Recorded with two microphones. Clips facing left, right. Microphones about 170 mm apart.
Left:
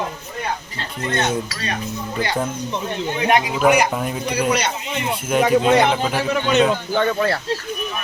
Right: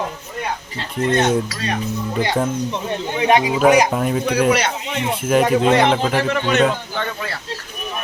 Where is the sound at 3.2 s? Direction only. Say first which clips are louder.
Right 3 dB; 25° right (ahead or behind).